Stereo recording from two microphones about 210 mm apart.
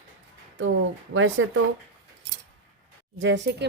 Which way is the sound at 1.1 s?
65° right (ahead or behind).